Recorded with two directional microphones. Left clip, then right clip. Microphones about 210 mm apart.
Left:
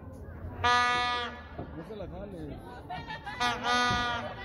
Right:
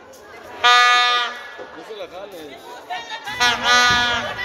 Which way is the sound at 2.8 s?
50° left (ahead or behind).